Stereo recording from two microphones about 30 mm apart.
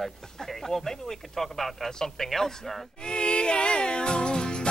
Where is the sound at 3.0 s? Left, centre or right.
Left.